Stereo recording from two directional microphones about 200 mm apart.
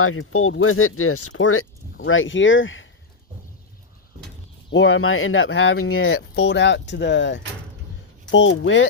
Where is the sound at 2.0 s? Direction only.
75° left (ahead or behind).